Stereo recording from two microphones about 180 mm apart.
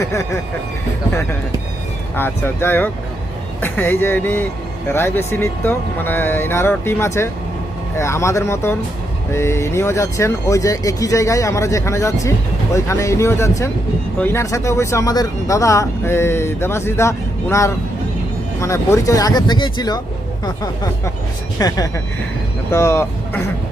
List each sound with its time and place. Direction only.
0.0 s speech: 15° left (ahead or behind)
2.1 s speech: 10° left (ahead or behind)